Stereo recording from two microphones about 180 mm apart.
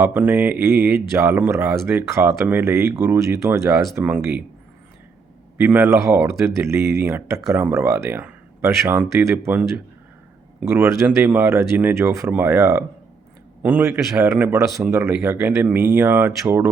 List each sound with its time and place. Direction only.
0.0 s speech: 10° right (ahead or behind)
5.5 s speech: 10° right (ahead or behind)